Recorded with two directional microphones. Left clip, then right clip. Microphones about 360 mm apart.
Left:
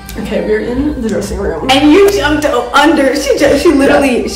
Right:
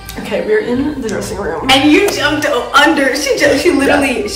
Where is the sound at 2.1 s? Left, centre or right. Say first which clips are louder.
Left 2 dB; centre.